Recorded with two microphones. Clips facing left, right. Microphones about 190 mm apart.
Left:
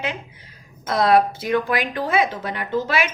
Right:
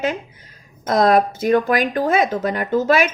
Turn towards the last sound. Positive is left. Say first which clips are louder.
# right 6 dB
turn(degrees=-45)  # may be behind; listen again after turning